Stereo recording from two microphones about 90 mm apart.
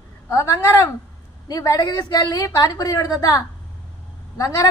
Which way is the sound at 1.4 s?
45° left (ahead or behind).